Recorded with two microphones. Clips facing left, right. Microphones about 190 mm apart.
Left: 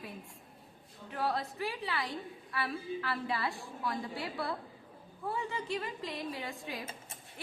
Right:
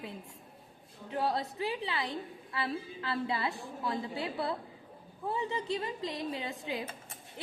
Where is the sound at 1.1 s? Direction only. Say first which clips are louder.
Right 2 dB; 25° right (ahead or behind).